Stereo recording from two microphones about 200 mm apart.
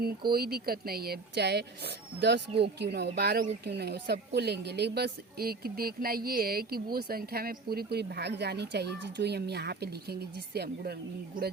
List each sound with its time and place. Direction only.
0.3 s a woman's voice: 50° right (ahead or behind)